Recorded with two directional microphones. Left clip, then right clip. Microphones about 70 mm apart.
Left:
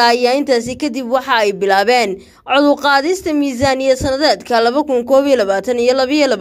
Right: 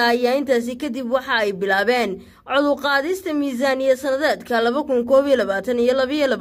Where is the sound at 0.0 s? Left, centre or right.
Left.